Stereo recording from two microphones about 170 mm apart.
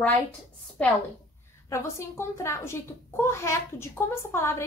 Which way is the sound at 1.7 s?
15° left (ahead or behind).